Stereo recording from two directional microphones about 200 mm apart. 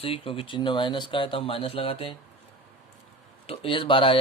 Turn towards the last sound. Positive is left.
turn(degrees=25)  # may be behind; listen again after turning